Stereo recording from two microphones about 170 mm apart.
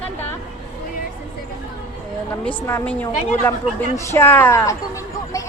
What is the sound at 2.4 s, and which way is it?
A woman's voice, 10° left (ahead or behind).